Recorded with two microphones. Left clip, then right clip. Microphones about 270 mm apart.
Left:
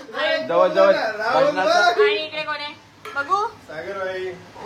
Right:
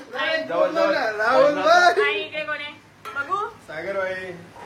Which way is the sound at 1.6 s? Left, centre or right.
Right.